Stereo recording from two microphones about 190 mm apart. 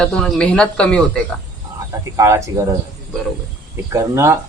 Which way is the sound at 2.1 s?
15° right (ahead or behind).